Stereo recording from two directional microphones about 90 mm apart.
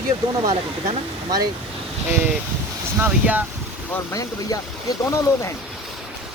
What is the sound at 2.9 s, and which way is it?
Speech, 20° right (ahead or behind).